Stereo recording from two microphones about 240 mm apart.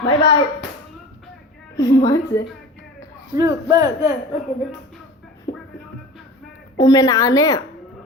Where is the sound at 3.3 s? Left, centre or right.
Centre.